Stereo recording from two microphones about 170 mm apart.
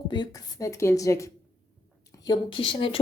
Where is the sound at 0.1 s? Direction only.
25° left (ahead or behind).